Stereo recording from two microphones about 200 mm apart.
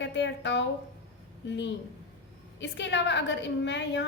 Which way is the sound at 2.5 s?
65° left (ahead or behind).